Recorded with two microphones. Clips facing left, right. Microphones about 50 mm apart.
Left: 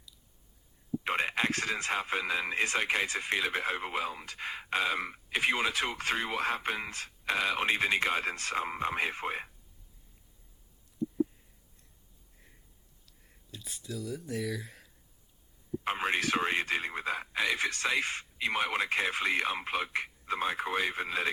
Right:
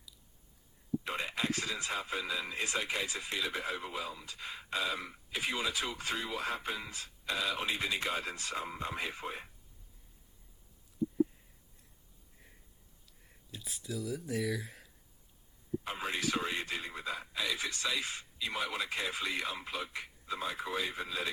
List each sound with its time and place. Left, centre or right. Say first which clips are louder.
1.0 s speech: left 7 dB; left
13.2 s speech: even; centre
15.8 s speech: left 7 dB; left